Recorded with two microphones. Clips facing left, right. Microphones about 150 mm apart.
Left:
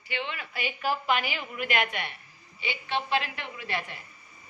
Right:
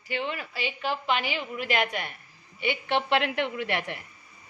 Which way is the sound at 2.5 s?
60° right (ahead or behind).